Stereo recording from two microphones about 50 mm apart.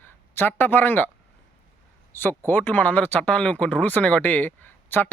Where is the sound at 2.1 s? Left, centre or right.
Left.